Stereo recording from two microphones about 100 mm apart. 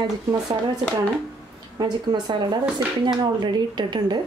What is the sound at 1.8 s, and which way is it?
Speech, 45° right (ahead or behind).